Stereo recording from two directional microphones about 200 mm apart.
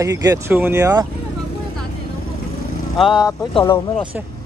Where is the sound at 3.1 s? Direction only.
20° left (ahead or behind).